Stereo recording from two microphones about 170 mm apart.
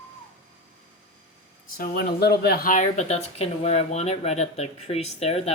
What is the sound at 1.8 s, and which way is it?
Speech, 65° left (ahead or behind).